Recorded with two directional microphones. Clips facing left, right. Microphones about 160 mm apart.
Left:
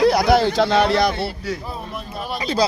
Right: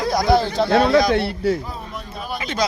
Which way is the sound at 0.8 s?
70° left (ahead or behind).